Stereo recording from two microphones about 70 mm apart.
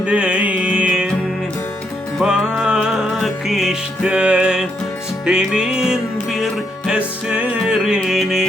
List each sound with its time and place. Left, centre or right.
0.0 s music: centre
2.2 s music: centre